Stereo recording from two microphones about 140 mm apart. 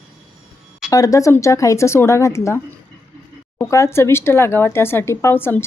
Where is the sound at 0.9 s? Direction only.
25° left (ahead or behind).